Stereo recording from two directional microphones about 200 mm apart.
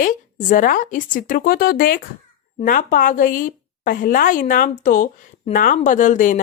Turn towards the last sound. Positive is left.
turn(degrees=40)  # may be behind; listen again after turning